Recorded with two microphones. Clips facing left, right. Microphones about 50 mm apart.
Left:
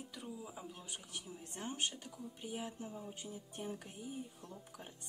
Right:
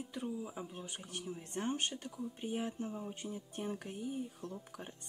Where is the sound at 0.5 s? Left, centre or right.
Right.